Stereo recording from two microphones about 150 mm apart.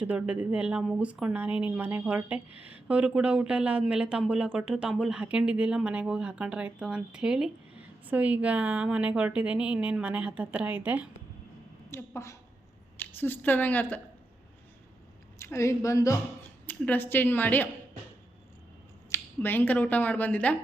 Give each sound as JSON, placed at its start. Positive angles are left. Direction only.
{"t": 0.0, "sound": "speech", "side_deg": -10}
{"t": 11.9, "sound": "a woman's voice", "side_deg": 20}
{"t": 15.4, "sound": "a woman's voice", "side_deg": 20}
{"t": 19.1, "sound": "speech", "side_deg": 15}